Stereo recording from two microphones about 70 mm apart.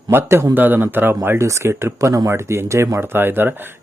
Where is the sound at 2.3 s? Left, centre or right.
Right.